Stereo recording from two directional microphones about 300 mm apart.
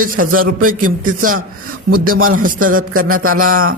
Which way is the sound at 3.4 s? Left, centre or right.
Right.